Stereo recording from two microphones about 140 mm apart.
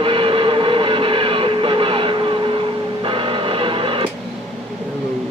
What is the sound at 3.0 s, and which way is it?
Printer, 40° right (ahead or behind).